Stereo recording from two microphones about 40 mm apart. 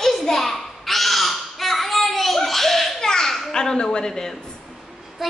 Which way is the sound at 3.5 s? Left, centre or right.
Centre.